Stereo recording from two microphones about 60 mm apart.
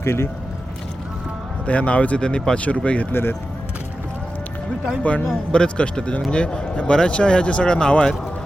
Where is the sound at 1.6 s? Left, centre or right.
Left.